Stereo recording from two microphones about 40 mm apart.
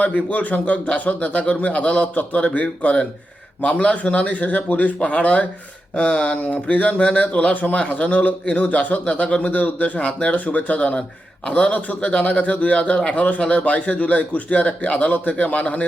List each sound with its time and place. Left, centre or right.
0.0 s a man's voice: left
10.8 s a man's voice: left